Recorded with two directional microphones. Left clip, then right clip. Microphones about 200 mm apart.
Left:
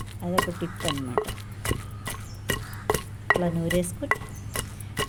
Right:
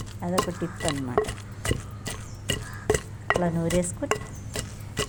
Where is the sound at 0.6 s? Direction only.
30° right (ahead or behind).